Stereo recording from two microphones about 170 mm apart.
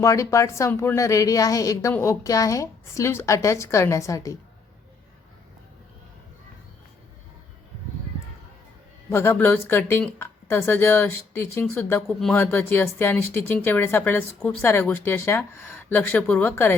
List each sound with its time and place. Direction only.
0.0 s a woman's voice: 20° left (ahead or behind)
9.0 s a woman's voice: 15° left (ahead or behind)